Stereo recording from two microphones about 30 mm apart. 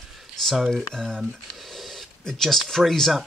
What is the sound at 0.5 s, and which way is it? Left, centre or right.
Speech, centre.